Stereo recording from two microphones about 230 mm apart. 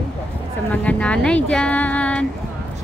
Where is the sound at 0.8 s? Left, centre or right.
Centre.